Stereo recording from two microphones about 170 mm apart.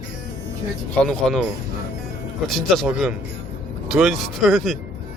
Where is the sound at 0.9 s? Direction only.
5° left (ahead or behind).